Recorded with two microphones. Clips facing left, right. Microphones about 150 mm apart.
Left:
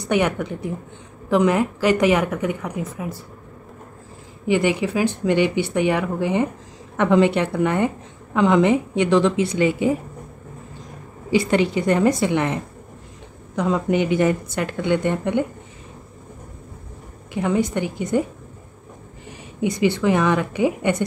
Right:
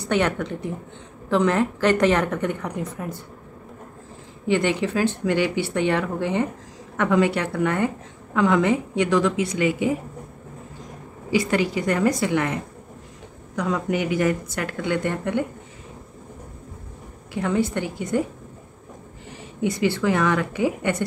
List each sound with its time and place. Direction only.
0.1 s speech: 10° left (ahead or behind)
4.5 s speech: 10° left (ahead or behind)
7.0 s speech: 25° left (ahead or behind)
11.2 s speech: 25° left (ahead or behind)
13.6 s speech: 25° left (ahead or behind)
17.3 s speech: 15° left (ahead or behind)
19.6 s speech: 15° left (ahead or behind)